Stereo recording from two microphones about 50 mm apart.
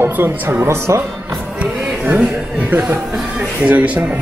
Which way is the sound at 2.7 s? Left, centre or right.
Right.